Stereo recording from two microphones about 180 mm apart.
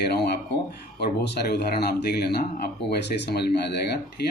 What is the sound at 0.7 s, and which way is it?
Speech, 65° left (ahead or behind).